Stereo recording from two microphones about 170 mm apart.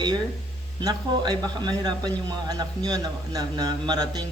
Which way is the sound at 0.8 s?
25° right (ahead or behind).